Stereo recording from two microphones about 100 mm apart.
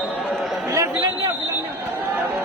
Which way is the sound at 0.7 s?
30° right (ahead or behind).